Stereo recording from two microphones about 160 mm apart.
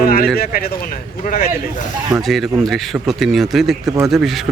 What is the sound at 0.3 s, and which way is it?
Speech, 65° left (ahead or behind).